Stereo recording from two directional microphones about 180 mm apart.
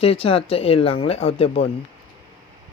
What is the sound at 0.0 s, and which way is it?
Speech, 30° left (ahead or behind).